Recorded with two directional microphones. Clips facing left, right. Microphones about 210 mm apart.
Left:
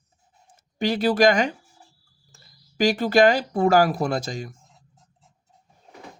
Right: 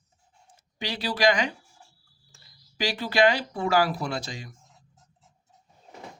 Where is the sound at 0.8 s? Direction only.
50° left (ahead or behind).